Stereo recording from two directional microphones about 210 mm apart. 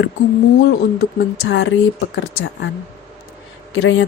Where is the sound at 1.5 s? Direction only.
65° left (ahead or behind).